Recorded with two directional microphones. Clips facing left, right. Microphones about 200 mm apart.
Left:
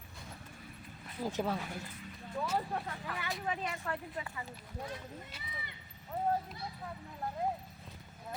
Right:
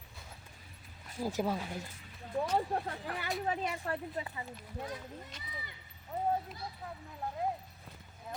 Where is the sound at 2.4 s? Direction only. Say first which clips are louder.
Right 3 dB; 35° right (ahead or behind).